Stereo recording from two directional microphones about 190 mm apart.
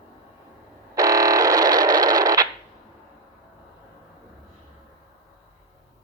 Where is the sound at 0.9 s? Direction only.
20° right (ahead or behind).